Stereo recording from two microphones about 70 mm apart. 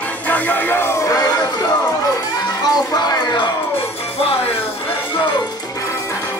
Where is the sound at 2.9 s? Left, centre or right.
Left.